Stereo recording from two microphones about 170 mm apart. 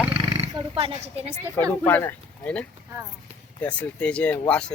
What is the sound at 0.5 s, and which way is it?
Speech, 30° right (ahead or behind).